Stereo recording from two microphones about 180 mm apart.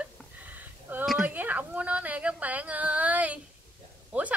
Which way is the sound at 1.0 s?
5° right (ahead or behind).